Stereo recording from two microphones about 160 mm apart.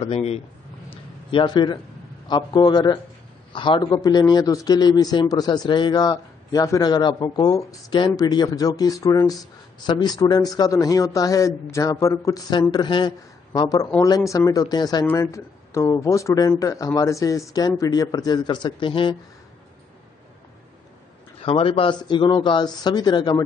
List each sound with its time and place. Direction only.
0.0 s a man's voice: 40° left (ahead or behind)
0.8 s a sound: 30° left (ahead or behind)
2.2 s a man's voice: 25° left (ahead or behind)
21.4 s speech: 35° left (ahead or behind)